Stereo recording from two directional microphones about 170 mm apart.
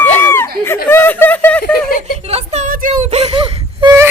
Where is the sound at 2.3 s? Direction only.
40° right (ahead or behind).